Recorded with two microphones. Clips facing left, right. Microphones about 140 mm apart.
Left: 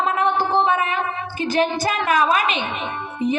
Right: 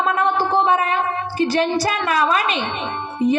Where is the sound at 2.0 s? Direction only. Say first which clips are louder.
Left 3 dB; 40° right (ahead or behind).